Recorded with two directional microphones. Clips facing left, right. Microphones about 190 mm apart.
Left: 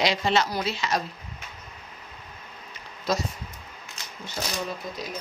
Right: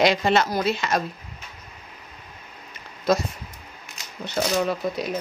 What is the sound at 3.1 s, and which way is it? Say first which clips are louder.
Speech: right 6 dB; 55° right (ahead or behind).